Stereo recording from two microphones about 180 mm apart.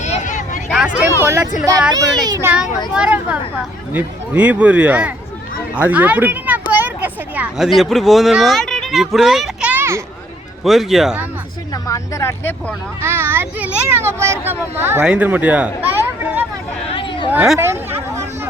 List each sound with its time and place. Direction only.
0.0 s a sound: 40° left (ahead or behind)
0.7 s a child's voice: 5° right (ahead or behind)
10.6 s speech: centre (ahead or behind)
11.7 s speech: 15° left (ahead or behind)
13.0 s a child's voice: 10° right (ahead or behind)
16.9 s a sound: 30° left (ahead or behind)
17.3 s speech: 5° right (ahead or behind)
17.6 s speech: 15° right (ahead or behind)